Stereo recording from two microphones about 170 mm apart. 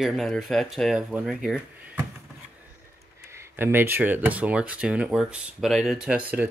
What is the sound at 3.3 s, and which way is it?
Speech, 15° right (ahead or behind).